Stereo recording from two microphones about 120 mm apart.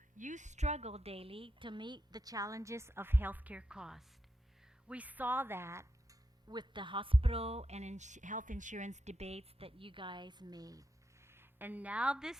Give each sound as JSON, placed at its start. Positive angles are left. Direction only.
{"t": 0.2, "sound": "a woman's voice", "side_deg": -90}
{"t": 6.5, "sound": "speech", "side_deg": -40}
{"t": 11.3, "sound": "a woman's voice", "side_deg": -15}